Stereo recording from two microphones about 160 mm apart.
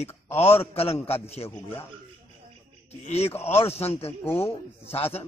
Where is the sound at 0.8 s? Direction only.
40° left (ahead or behind).